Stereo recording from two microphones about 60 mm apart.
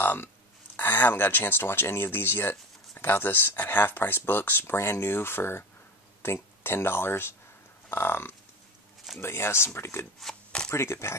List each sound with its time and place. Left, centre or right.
0.0 s speech: left
4.7 s speech: left
10.3 s speech: centre
10.7 s speech: left